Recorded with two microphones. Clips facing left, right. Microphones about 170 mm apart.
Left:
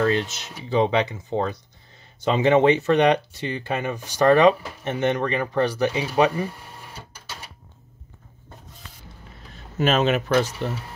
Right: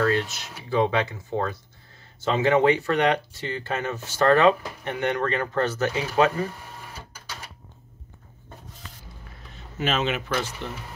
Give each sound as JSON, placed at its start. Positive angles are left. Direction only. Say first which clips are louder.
{"t": 0.0, "sound": "speech", "louder": "left 2 dB", "side_deg": 20}
{"t": 9.8, "sound": "speech", "louder": "left 6 dB", "side_deg": 40}